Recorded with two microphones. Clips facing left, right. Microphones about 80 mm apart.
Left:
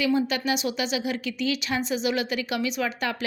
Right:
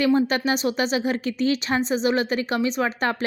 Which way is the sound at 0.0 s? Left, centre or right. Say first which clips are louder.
Right 4 dB; right.